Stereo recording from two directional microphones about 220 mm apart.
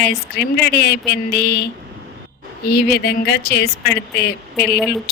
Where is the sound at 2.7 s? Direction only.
45° left (ahead or behind).